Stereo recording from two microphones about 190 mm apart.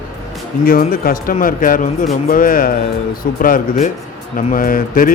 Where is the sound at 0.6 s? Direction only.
50° left (ahead or behind).